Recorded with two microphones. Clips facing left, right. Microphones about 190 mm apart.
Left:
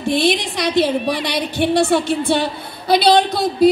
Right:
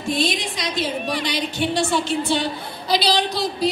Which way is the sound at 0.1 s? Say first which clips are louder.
Left 5 dB; 65° left (ahead or behind).